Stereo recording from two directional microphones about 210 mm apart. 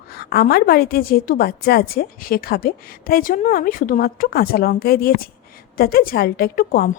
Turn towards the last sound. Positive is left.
turn(degrees=45)  # may be behind; listen again after turning